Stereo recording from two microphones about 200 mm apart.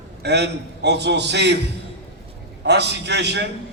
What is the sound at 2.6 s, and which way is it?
Speech, 55° right (ahead or behind).